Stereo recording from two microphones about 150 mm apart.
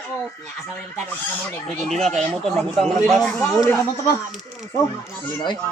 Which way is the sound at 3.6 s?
15° left (ahead or behind).